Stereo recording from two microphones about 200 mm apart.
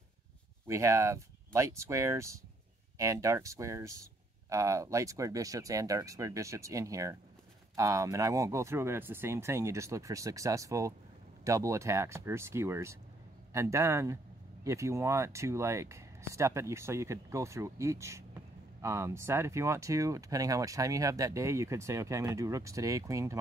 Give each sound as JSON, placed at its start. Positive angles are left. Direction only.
{"t": 0.7, "sound": "speech", "side_deg": -15}